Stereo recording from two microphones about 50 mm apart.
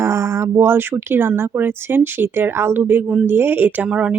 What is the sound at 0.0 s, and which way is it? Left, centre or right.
Speech, right.